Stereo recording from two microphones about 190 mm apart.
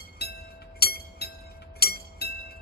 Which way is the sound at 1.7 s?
55° left (ahead or behind).